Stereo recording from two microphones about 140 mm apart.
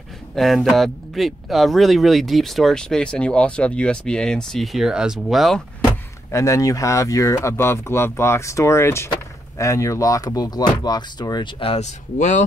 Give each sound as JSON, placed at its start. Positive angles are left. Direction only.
{"t": 0.4, "sound": "speech", "side_deg": 5}
{"t": 6.3, "sound": "speech", "side_deg": 25}
{"t": 11.6, "sound": "speech", "side_deg": 50}